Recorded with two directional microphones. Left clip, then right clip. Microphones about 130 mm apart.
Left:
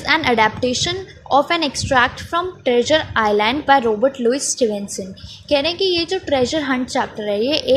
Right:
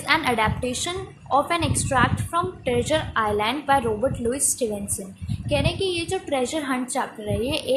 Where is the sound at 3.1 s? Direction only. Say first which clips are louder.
Left 6 dB; 50° left (ahead or behind).